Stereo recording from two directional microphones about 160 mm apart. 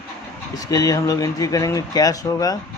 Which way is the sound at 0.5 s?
20° left (ahead or behind).